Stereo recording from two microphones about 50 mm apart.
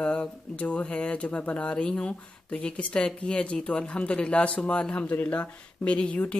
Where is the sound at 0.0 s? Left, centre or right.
Left.